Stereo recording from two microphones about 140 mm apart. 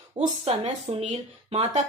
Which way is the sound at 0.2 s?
45° right (ahead or behind).